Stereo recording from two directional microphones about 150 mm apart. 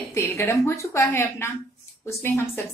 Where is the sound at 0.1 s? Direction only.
20° left (ahead or behind).